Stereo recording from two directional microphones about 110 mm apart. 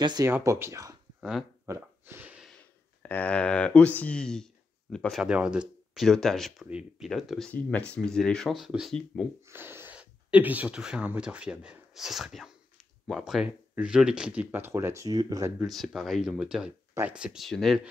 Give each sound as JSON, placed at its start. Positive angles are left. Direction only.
{"t": 0.2, "sound": "speech", "side_deg": -30}
{"t": 1.7, "sound": "a sound", "side_deg": -20}
{"t": 3.0, "sound": "speech", "side_deg": 15}
{"t": 5.2, "sound": "speech", "side_deg": -10}
{"t": 6.0, "sound": "speech", "side_deg": 5}
{"t": 6.7, "sound": "speech", "side_deg": -10}
{"t": 7.1, "sound": "speech", "side_deg": 0}
{"t": 7.5, "sound": "speech", "side_deg": 15}
{"t": 9.5, "sound": "gasp", "side_deg": -20}
{"t": 9.9, "sound": "speech", "side_deg": -15}
{"t": 15.6, "sound": "speech", "side_deg": 0}